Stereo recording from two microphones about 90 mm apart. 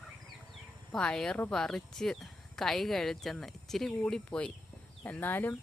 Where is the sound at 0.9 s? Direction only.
5° left (ahead or behind).